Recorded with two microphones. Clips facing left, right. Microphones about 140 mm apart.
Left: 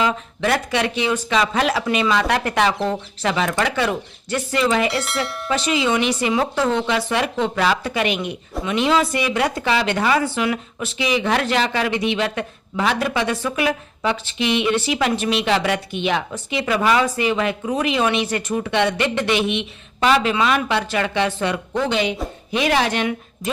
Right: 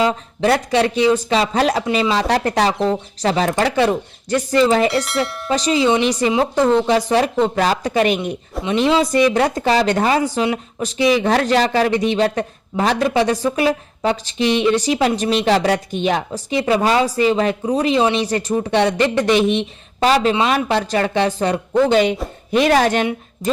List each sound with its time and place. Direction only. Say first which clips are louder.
0.0 s a woman's voice: right 4 dB; 35° right (ahead or behind)
5.0 s speech: right 4 dB; centre (ahead or behind)
5.5 s a woman's voice: right 4 dB; 35° right (ahead or behind)
10.4 s speech: right 3 dB; 30° right (ahead or behind)
10.8 s a woman's voice: right 5 dB; 40° right (ahead or behind)